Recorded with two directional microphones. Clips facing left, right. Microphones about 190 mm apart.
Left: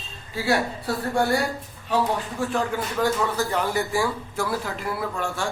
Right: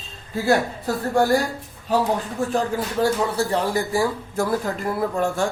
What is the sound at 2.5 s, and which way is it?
Speech, 35° right (ahead or behind).